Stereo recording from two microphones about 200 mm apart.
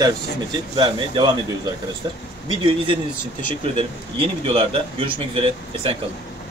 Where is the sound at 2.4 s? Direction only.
25° right (ahead or behind).